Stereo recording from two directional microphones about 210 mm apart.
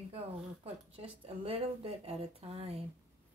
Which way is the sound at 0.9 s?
25° right (ahead or behind).